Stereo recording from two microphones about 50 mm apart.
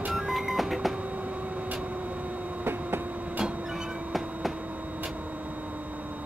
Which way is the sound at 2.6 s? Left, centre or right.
Right.